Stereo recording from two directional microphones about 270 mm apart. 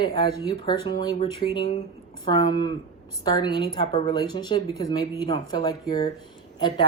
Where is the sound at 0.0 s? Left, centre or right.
Centre.